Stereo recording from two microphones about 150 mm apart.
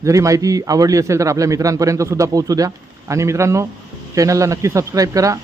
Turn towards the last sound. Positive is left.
turn(degrees=-20)  # may be behind; listen again after turning